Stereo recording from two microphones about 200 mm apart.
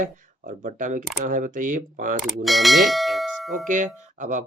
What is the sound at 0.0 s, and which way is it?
Speech, 40° right (ahead or behind).